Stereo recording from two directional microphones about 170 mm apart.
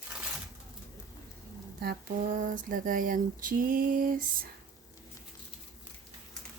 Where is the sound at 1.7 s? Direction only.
60° right (ahead or behind).